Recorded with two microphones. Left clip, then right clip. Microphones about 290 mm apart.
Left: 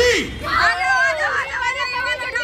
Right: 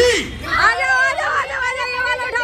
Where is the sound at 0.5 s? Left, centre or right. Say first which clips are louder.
Right 2 dB; centre.